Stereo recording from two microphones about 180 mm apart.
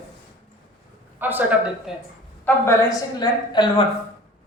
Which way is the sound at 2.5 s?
15° left (ahead or behind).